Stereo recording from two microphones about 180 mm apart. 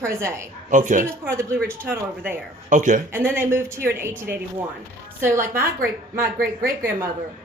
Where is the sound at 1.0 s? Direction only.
15° right (ahead or behind).